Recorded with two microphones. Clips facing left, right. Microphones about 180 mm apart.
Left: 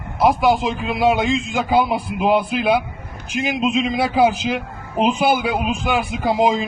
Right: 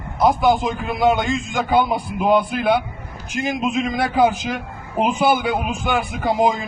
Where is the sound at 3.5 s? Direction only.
20° left (ahead or behind).